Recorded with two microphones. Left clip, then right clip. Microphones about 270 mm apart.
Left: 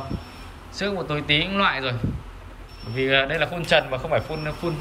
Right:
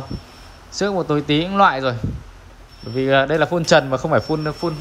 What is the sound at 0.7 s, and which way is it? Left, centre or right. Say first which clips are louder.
Speech: right 7 dB; centre.